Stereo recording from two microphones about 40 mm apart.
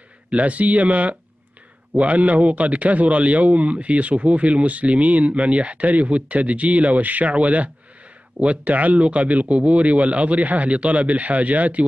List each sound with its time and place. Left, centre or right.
0.3 s a man's voice: right